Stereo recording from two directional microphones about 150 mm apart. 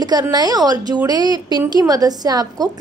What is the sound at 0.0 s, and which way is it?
A woman's voice, 30° right (ahead or behind).